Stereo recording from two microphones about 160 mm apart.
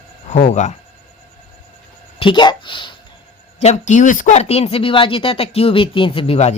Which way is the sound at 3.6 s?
45° left (ahead or behind).